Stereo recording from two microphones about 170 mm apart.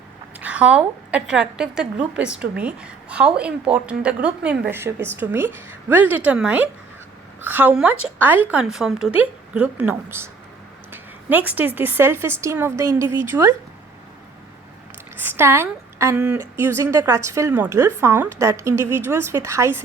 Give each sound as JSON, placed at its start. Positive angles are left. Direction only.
{"t": 0.3, "sound": "a woman's voice", "side_deg": -10}
{"t": 15.2, "sound": "a woman's voice", "side_deg": -15}